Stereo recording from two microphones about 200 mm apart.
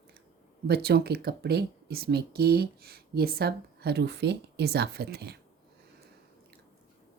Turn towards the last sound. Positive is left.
turn(degrees=-55)  # may be behind; listen again after turning